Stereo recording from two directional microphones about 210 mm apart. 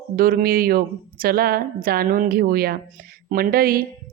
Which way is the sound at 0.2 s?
45° right (ahead or behind).